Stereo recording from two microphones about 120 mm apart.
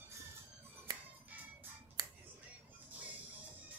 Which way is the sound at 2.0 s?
30° right (ahead or behind).